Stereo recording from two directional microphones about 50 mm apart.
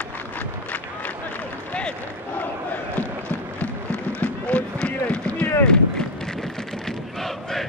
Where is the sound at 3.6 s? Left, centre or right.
Left.